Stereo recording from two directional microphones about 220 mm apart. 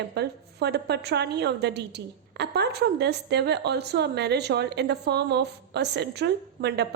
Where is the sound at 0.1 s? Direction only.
50° right (ahead or behind).